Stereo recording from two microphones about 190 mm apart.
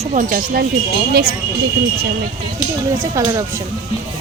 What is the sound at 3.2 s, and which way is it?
Speech, 20° right (ahead or behind).